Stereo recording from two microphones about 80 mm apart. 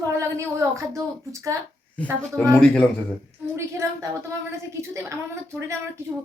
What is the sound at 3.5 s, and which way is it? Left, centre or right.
Speech, right.